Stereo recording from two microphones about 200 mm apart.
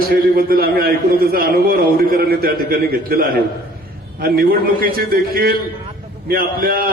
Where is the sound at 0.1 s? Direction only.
50° right (ahead or behind).